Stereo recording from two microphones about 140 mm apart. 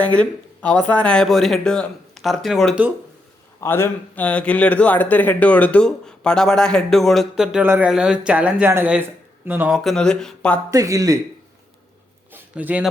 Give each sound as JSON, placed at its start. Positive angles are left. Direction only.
{"t": 0.0, "sound": "speech", "side_deg": 10}
{"t": 3.6, "sound": "speech", "side_deg": 20}
{"t": 9.7, "sound": "speech", "side_deg": 5}
{"t": 10.7, "sound": "a man's voice", "side_deg": -25}
{"t": 12.3, "sound": "a sound", "side_deg": -15}